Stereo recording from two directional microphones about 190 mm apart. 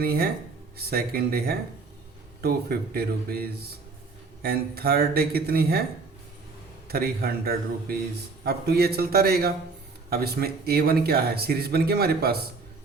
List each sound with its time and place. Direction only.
0.0 s speech: 55° right (ahead or behind)
6.8 s speech: 55° right (ahead or behind)